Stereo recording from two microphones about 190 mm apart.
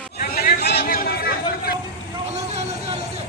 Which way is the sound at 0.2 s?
50° left (ahead or behind).